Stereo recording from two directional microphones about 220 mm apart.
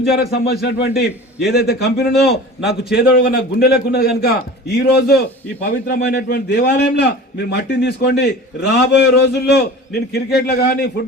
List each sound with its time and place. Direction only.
0.2 s a man's voice: 45° left (ahead or behind)
2.1 s a man's voice: centre (ahead or behind)
2.9 s a man's voice: 45° left (ahead or behind)